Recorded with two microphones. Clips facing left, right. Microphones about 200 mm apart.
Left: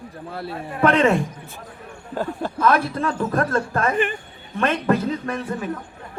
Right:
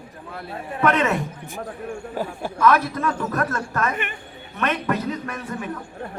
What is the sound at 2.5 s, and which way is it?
A man's voice, 30° left (ahead or behind).